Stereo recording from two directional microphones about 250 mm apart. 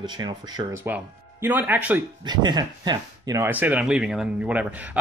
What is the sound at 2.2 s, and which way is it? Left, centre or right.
Speech, centre.